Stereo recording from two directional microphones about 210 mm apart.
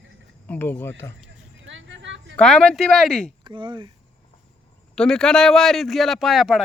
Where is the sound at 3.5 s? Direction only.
20° right (ahead or behind).